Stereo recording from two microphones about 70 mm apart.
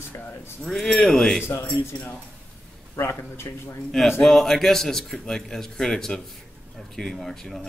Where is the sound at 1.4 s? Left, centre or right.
Left.